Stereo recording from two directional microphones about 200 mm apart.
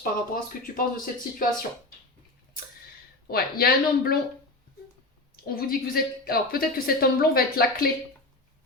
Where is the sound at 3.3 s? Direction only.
50° left (ahead or behind).